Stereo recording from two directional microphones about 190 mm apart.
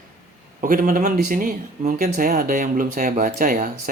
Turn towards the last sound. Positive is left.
turn(degrees=-45)  # may be behind; listen again after turning